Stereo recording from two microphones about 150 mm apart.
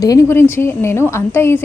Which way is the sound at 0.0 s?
20° left (ahead or behind).